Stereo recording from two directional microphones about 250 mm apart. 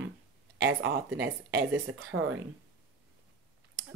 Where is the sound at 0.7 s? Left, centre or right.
Right.